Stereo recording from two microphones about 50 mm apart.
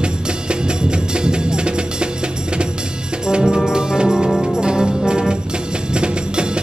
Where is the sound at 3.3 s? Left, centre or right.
Centre.